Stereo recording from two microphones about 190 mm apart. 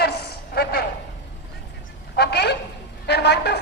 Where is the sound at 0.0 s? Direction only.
60° left (ahead or behind).